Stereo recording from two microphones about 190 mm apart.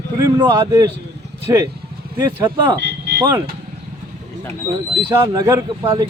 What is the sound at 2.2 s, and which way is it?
Speech, 20° right (ahead or behind).